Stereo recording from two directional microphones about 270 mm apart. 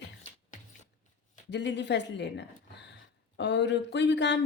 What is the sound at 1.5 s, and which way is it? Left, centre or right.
Speech, left.